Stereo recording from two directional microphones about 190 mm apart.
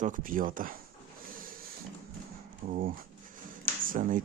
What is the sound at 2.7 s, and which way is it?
Speech, 50° right (ahead or behind).